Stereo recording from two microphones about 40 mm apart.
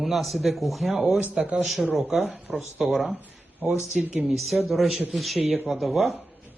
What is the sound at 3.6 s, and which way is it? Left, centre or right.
Speech, right.